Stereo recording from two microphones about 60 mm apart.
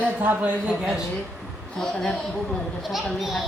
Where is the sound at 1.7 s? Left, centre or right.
Centre.